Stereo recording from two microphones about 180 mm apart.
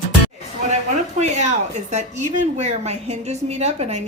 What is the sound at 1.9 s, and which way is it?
A woman's voice, 40° right (ahead or behind).